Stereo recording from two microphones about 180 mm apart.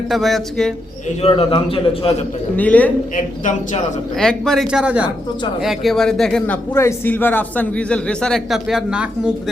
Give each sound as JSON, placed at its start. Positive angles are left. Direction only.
{"t": 0.1, "sound": "a man's voice", "side_deg": 0}
{"t": 1.2, "sound": "a man's voice", "side_deg": 30}
{"t": 2.6, "sound": "a man's voice", "side_deg": 10}
{"t": 4.2, "sound": "a man's voice", "side_deg": 5}